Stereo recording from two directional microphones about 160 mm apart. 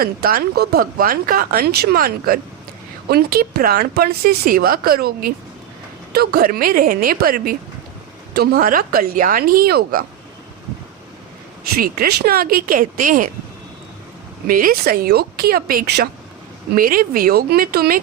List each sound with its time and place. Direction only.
0.0 s speech: 70° right (ahead or behind)
11.7 s speech: 70° right (ahead or behind)
14.4 s speech: 65° right (ahead or behind); by 16.0 s 80° right
16.7 s speech: 60° right (ahead or behind)